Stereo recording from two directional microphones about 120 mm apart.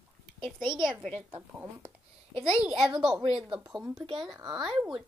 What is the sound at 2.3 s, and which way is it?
Speech, 45° right (ahead or behind).